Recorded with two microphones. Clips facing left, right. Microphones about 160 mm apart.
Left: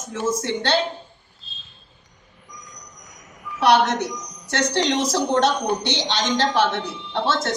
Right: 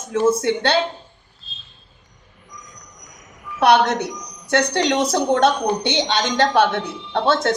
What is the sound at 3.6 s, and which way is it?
A woman's voice, 60° right (ahead or behind).